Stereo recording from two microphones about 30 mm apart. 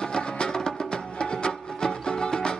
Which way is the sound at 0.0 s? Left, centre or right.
Left.